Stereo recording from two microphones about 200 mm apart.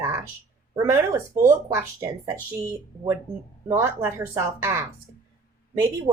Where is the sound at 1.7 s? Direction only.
15° right (ahead or behind).